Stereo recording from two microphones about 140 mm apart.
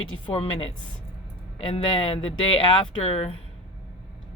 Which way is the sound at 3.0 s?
45° left (ahead or behind).